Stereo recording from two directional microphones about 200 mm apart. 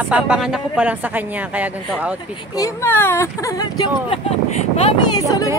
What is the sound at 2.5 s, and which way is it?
Speech, 15° left (ahead or behind).